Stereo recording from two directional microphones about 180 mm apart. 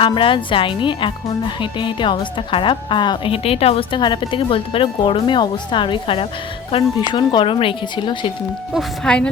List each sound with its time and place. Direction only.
0.0 s speech: 30° left (ahead or behind)
8.7 s speech: 5° left (ahead or behind)